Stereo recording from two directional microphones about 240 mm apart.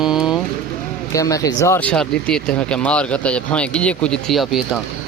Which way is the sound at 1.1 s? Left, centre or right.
Centre.